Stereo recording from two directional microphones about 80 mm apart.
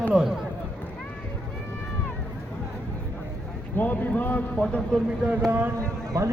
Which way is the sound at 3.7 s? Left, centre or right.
Left.